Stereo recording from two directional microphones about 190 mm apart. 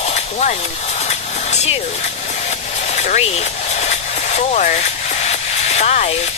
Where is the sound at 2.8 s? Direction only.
35° left (ahead or behind).